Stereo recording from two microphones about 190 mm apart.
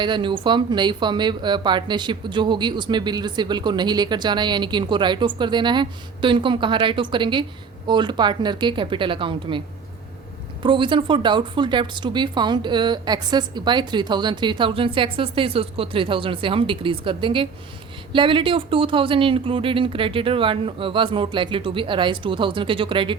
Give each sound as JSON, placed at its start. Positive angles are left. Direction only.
{"t": 0.0, "sound": "speech", "side_deg": -25}
{"t": 10.6, "sound": "speech", "side_deg": -25}